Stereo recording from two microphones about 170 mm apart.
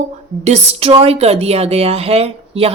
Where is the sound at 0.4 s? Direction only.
40° right (ahead or behind).